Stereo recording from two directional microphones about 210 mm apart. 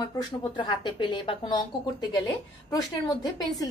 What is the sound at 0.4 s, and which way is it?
A woman's voice, 20° left (ahead or behind).